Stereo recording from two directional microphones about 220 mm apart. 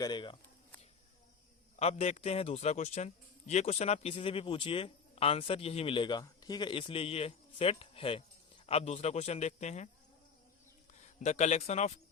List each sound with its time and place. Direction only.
0.0 s a man's voice: 20° left (ahead or behind)
1.8 s a man's voice: 30° left (ahead or behind)
11.2 s speech: 30° left (ahead or behind)